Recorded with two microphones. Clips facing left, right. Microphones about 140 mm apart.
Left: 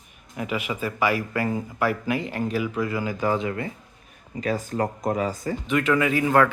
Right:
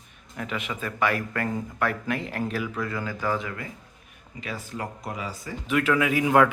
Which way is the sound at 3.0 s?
20° left (ahead or behind).